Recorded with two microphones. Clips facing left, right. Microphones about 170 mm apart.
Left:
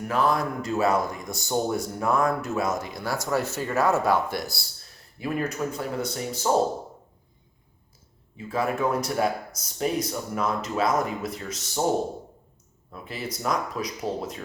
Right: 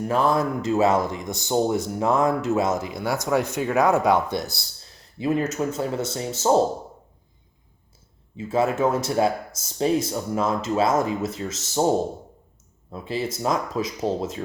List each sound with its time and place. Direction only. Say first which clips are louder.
0.1 s speech: right 2 dB; 25° right (ahead or behind)
8.4 s speech: right 4 dB; 25° right (ahead or behind)
12.9 s speech: right 7 dB; 30° right (ahead or behind)